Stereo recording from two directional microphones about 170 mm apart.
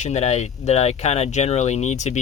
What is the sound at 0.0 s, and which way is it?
Speech, 40° left (ahead or behind).